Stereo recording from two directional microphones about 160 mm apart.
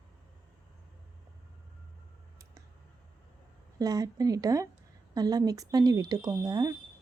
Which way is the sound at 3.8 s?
25° right (ahead or behind).